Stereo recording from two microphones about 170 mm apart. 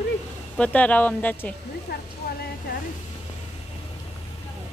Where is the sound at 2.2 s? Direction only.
65° left (ahead or behind).